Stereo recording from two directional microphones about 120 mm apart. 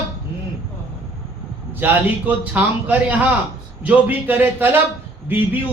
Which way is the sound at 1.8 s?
15° right (ahead or behind).